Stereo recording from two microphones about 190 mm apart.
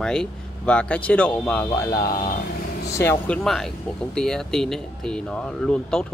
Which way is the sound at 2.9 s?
15° left (ahead or behind).